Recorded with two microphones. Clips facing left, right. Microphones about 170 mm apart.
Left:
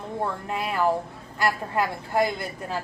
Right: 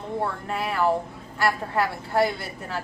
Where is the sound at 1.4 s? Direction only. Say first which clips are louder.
Right 1 dB; 15° left (ahead or behind).